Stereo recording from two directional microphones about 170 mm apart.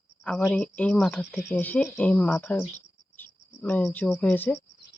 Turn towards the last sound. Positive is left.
turn(degrees=10)  # may be behind; listen again after turning